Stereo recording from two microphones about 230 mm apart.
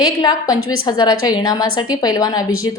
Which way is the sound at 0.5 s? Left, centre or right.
Left.